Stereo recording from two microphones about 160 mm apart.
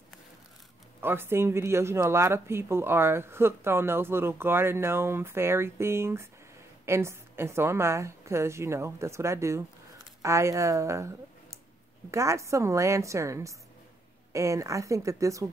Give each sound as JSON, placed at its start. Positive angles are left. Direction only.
{"t": 1.0, "sound": "a woman's voice", "side_deg": -15}